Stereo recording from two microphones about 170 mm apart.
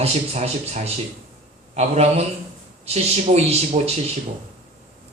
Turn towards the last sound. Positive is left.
turn(degrees=-40)  # may be behind; listen again after turning